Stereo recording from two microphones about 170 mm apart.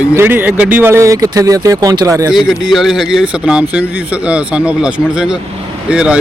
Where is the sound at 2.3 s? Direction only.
Centre (ahead or behind).